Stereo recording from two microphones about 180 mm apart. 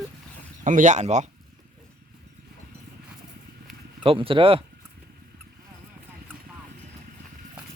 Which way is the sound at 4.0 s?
30° right (ahead or behind).